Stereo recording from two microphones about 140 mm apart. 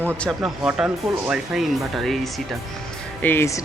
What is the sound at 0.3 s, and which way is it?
Speech, 5° right (ahead or behind).